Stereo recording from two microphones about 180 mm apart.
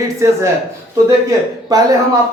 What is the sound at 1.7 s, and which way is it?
Speech, 20° right (ahead or behind).